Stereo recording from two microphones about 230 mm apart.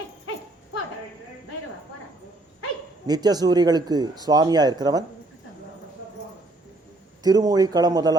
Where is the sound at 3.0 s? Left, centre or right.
Centre.